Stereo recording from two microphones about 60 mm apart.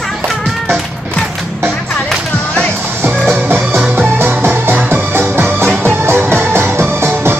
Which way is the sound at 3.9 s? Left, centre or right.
Right.